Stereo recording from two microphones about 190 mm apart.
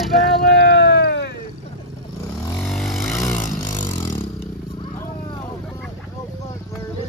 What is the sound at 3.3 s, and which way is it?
Vehicle, 40° left (ahead or behind).